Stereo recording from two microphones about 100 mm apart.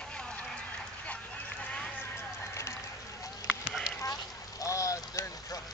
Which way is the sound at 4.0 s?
35° left (ahead or behind).